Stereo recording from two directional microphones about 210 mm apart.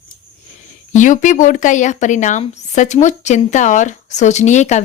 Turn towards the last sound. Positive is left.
turn(degrees=35)  # may be behind; listen again after turning